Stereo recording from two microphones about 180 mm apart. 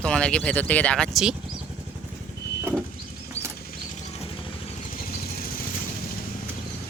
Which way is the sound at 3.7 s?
45° left (ahead or behind).